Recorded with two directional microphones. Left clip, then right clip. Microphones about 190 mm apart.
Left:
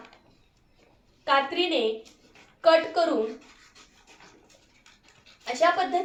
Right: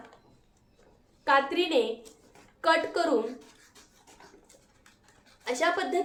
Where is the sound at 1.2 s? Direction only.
50° right (ahead or behind).